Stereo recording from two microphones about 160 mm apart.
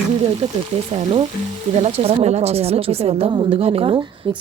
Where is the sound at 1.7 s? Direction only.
40° right (ahead or behind).